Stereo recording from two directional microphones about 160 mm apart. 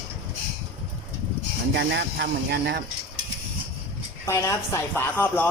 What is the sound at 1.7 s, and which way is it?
Speech, 90° right.